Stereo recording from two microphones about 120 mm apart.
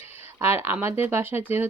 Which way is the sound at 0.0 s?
65° left (ahead or behind).